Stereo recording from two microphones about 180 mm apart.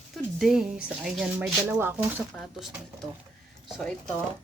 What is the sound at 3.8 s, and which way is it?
Speech, 5° left (ahead or behind).